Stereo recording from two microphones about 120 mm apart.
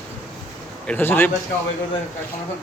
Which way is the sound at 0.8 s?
15° left (ahead or behind).